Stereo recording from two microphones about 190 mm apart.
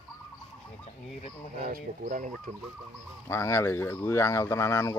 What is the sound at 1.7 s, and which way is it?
Speech, 45° right (ahead or behind).